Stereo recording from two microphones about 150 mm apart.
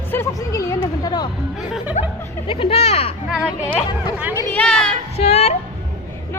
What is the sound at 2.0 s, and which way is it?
Chuckle, 55° left (ahead or behind).